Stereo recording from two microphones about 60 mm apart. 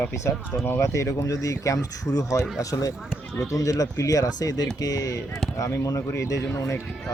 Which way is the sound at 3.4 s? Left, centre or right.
Left.